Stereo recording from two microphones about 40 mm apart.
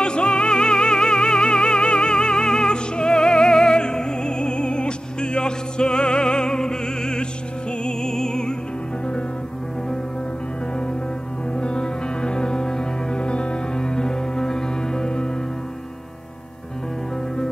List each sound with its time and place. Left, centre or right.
0.0 s music: left
11.5 s music: left